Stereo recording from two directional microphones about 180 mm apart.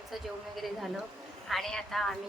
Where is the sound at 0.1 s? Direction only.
Centre (ahead or behind).